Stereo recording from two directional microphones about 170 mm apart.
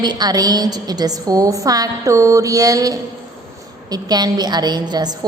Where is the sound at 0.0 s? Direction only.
25° right (ahead or behind).